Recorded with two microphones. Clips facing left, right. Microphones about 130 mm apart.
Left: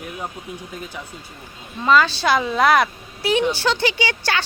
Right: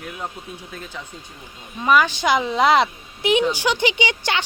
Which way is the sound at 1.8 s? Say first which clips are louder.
Left 1 dB; 15° right (ahead or behind).